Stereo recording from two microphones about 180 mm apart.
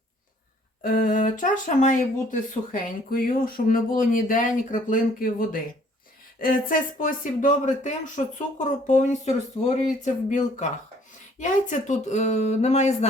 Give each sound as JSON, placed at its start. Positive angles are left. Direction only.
{"t": 0.8, "sound": "speech", "side_deg": 50}